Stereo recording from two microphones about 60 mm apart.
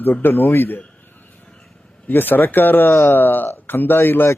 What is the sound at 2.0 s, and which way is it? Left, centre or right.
Speech, left.